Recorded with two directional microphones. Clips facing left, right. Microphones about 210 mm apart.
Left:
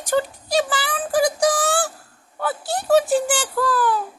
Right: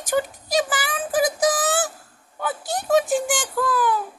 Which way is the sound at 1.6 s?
20° right (ahead or behind).